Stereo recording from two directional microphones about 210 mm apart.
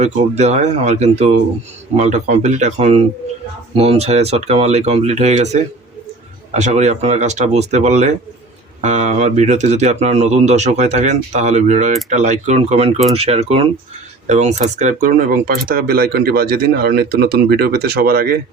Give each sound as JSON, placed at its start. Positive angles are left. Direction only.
{"t": 0.0, "sound": "speech", "side_deg": -35}